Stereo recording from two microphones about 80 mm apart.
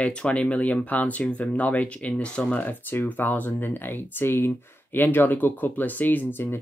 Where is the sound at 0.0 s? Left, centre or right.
Centre.